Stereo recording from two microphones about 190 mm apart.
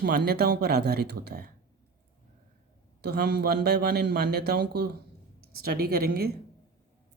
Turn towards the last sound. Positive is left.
turn(degrees=-55)  # may be behind; listen again after turning